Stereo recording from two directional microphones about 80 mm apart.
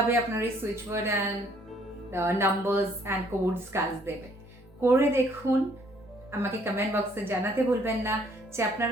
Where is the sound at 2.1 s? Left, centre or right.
Right.